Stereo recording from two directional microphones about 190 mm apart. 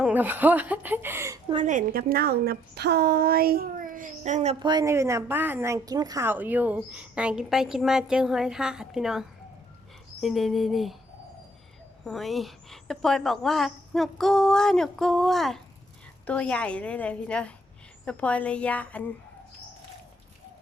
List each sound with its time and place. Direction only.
0.0 s speech: 10° right (ahead or behind)
1.6 s a woman's voice: 45° right (ahead or behind)
4.6 s a woman's voice: 20° right (ahead or behind); by 10.9 s centre (ahead or behind)
12.0 s a woman's voice: centre (ahead or behind)